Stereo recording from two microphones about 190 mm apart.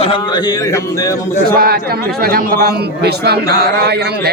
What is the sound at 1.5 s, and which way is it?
A man's voice, 50° right (ahead or behind).